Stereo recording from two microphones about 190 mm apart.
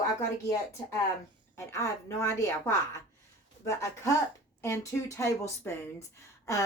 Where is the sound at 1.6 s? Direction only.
15° left (ahead or behind).